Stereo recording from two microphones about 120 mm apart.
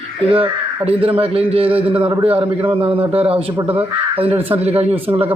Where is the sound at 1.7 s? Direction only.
10° right (ahead or behind).